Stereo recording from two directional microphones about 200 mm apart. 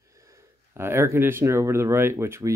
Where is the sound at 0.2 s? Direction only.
15° right (ahead or behind).